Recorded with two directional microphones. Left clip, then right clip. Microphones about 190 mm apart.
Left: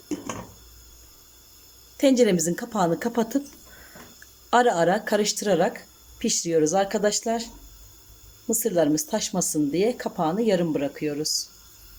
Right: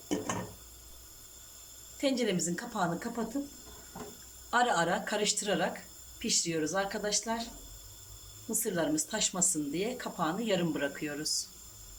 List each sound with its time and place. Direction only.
2.0 s speech: 40° left (ahead or behind)
4.5 s speech: 35° left (ahead or behind)
8.5 s speech: 35° left (ahead or behind)